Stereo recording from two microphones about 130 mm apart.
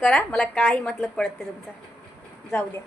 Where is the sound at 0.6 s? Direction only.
15° left (ahead or behind).